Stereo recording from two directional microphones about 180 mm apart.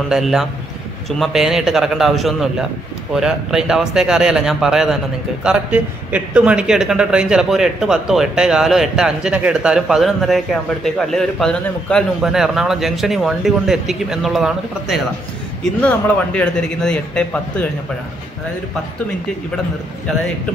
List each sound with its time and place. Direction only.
0.1 s a man's voice: centre (ahead or behind)
16.3 s a man's voice: 5° left (ahead or behind)